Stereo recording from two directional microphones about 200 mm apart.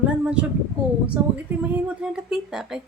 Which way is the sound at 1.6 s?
5° right (ahead or behind).